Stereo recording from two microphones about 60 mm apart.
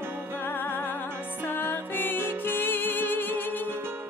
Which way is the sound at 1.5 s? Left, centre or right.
Left.